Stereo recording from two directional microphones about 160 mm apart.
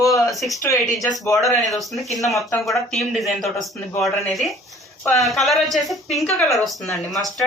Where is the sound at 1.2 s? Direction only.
20° left (ahead or behind).